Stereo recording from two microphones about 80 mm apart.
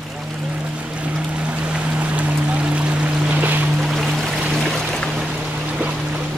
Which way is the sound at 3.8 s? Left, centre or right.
Centre.